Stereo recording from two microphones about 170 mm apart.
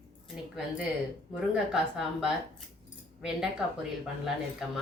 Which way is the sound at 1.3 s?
5° right (ahead or behind).